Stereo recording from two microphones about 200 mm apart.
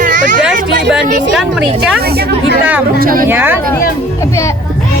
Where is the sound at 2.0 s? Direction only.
50° right (ahead or behind).